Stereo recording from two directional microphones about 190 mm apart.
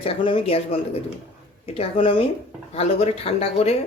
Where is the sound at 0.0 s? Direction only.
30° left (ahead or behind).